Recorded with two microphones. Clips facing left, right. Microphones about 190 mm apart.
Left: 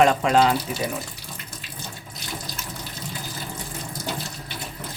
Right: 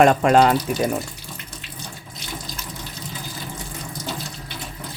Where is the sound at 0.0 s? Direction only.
50° right (ahead or behind).